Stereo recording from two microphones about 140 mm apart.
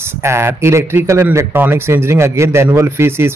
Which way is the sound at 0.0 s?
20° right (ahead or behind).